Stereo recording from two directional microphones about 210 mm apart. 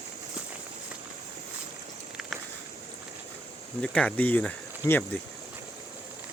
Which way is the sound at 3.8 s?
5° left (ahead or behind).